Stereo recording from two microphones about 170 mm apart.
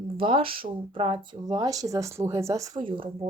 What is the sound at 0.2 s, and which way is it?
Speech, 30° right (ahead or behind).